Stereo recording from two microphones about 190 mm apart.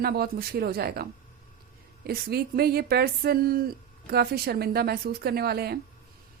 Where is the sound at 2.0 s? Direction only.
55° right (ahead or behind).